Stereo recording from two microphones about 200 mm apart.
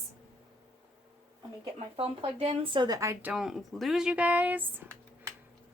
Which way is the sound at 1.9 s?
30° right (ahead or behind).